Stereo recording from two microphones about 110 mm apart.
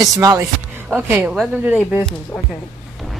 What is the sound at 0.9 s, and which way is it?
Speech, 15° right (ahead or behind).